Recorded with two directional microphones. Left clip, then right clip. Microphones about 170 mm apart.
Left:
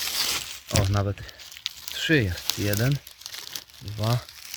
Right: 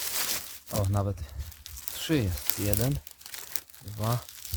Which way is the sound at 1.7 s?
30° left (ahead or behind).